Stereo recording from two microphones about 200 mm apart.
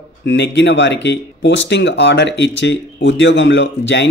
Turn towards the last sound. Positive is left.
turn(degrees=65)  # may be behind; listen again after turning